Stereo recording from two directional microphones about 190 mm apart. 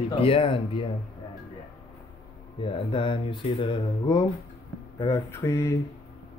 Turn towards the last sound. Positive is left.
turn(degrees=15)  # may be behind; listen again after turning